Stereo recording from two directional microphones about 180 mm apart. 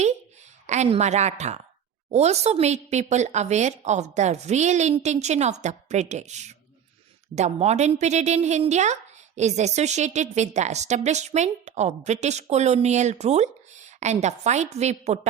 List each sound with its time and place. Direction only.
0.7 s a woman's voice: 40° right (ahead or behind)